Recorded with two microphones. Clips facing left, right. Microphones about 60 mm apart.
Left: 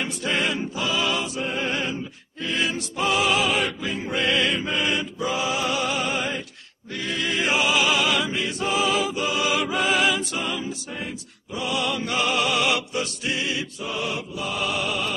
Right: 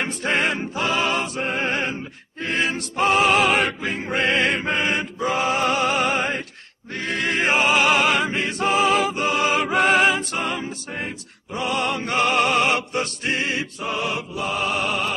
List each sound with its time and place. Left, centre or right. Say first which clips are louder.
0.0 s music: right 3 dB; right